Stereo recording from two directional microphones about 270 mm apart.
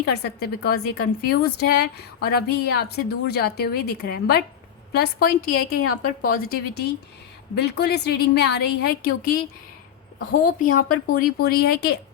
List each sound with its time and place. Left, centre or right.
0.0 s a woman's voice: left